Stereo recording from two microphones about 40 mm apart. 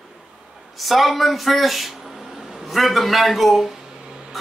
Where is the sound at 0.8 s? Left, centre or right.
Centre.